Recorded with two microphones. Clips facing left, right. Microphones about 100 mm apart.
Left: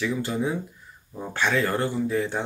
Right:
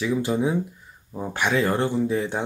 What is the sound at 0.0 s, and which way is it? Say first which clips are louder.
Speech: right 3 dB; 15° right (ahead or behind).